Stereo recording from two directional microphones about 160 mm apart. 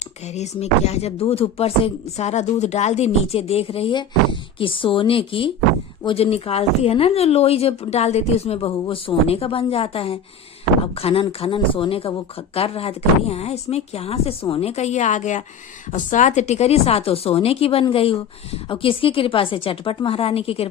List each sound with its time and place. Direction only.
0.3 s a woman's voice: 45° left (ahead or behind)